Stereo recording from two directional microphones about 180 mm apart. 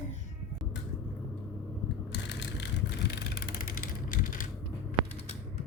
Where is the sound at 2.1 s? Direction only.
85° left; by 4.4 s 50° left (ahead or behind).